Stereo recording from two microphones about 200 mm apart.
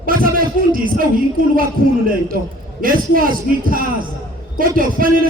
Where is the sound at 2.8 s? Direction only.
45° right (ahead or behind).